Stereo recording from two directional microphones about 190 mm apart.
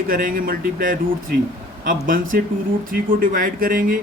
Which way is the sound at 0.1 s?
50° right (ahead or behind).